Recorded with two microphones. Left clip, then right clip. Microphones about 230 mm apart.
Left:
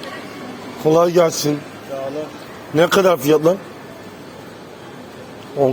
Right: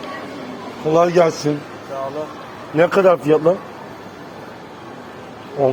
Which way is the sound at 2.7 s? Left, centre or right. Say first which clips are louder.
Even; left.